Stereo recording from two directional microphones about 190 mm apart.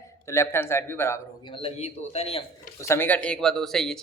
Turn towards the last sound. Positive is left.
turn(degrees=0)  # may be behind; listen again after turning